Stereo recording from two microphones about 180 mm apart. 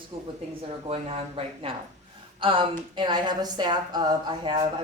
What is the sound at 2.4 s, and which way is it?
Speech, 30° right (ahead or behind).